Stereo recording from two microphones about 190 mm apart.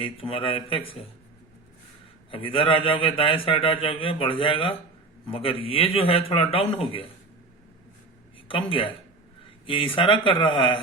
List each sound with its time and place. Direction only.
0.0 s a man's voice: 30° left (ahead or behind)
2.3 s a man's voice: 30° left (ahead or behind)
8.4 s a man's voice: 25° left (ahead or behind)